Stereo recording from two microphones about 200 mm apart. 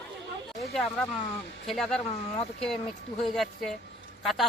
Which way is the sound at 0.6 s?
Centre (ahead or behind).